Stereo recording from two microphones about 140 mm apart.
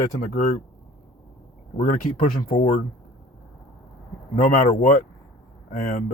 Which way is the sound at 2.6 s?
50° left (ahead or behind).